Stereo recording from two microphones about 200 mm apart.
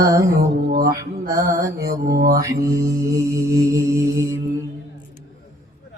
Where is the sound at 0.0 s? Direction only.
15° right (ahead or behind).